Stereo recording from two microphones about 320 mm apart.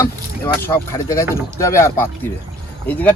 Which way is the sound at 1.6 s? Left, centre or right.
Centre.